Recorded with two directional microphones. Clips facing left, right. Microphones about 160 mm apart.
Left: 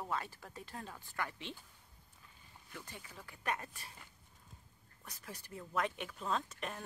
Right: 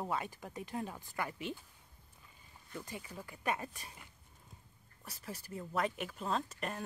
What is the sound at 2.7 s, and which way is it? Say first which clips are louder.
Speech: right 6 dB; 10° right (ahead or behind).